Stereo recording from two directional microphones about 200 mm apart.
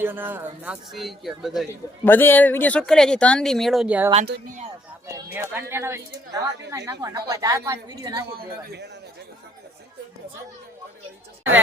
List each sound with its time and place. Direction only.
0.0 s speech: 10° right (ahead or behind)
2.0 s speech: 10° left (ahead or behind); by 4.1 s 5° right (ahead or behind)
5.1 s speech: 10° right (ahead or behind)
8.4 s speech: 55° right (ahead or behind)